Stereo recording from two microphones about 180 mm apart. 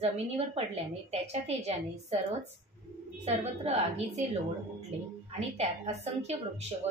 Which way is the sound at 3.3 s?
35° right (ahead or behind).